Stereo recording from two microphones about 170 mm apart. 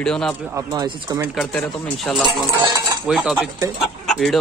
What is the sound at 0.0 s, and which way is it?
Speech, 5° left (ahead or behind).